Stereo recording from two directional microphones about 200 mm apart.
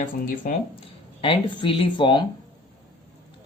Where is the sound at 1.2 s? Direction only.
25° left (ahead or behind).